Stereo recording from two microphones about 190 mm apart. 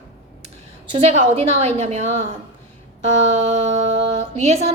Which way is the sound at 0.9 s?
35° right (ahead or behind).